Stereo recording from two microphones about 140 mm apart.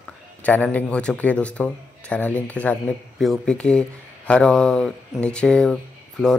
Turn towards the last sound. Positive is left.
turn(degrees=5)  # may be behind; listen again after turning